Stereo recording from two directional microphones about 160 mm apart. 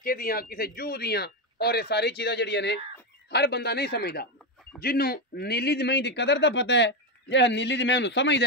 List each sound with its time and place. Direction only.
0.0 s speech: 65° left (ahead or behind); by 4.3 s 90° left
4.8 s speech: 75° left (ahead or behind); by 8.5 s 90° left